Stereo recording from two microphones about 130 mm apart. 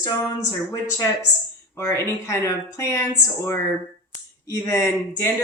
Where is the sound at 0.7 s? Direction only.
25° left (ahead or behind).